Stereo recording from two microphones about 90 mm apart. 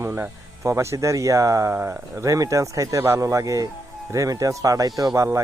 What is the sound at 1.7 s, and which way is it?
Speech, 20° right (ahead or behind).